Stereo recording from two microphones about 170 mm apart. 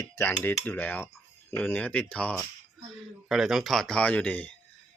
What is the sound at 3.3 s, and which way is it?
Speech, centre (ahead or behind).